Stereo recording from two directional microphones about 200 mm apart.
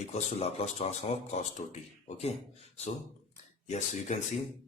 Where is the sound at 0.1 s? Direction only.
30° left (ahead or behind).